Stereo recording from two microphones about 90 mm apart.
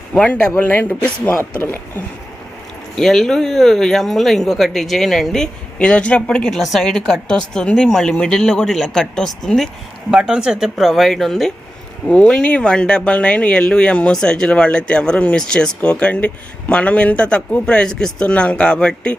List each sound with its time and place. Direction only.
0.1 s speech: 15° left (ahead or behind)
2.9 s speech: 5° left (ahead or behind)
10.1 s speech: 10° right (ahead or behind); by 19.1 s 10° left (ahead or behind)